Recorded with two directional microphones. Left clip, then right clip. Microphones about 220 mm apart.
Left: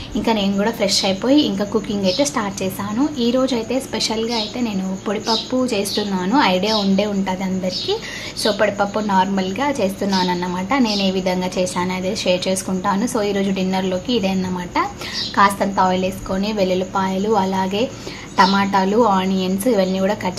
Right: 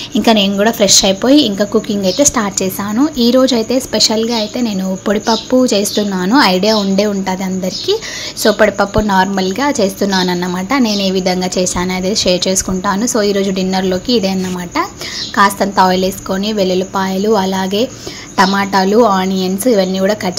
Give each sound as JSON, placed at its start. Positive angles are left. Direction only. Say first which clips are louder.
{"t": 0.1, "sound": "a woman's voice", "louder": "right 8 dB", "side_deg": -30}
{"t": 15.3, "sound": "a woman's voice", "louder": "right 5 dB", "side_deg": -20}